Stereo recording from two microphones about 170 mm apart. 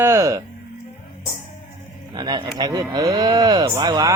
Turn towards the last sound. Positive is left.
turn(degrees=-20)  # may be behind; listen again after turning